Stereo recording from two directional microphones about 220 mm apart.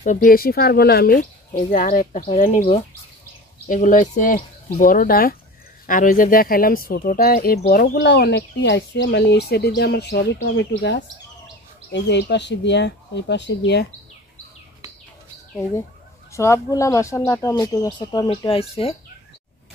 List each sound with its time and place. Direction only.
0.0 s speech: 35° left (ahead or behind)
16.3 s speech: 15° left (ahead or behind)